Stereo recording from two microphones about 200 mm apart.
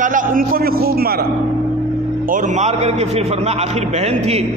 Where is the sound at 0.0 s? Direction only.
45° right (ahead or behind).